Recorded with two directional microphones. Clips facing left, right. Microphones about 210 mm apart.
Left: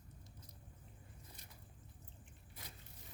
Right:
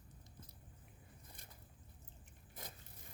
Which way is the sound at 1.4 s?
55° right (ahead or behind).